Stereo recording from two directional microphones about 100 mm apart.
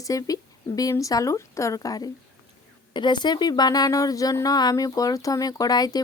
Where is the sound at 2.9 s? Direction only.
50° left (ahead or behind).